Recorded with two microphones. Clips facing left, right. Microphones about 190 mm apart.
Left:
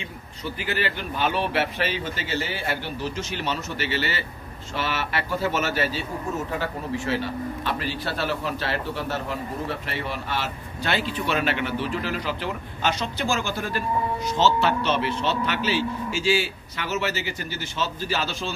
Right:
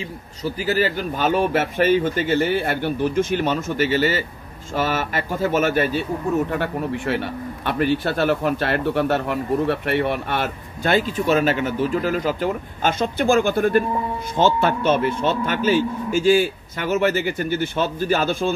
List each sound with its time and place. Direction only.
0.0 s speech: 40° right (ahead or behind)